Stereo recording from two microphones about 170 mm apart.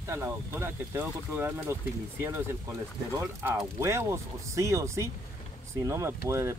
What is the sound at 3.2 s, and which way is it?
Speech, 15° right (ahead or behind).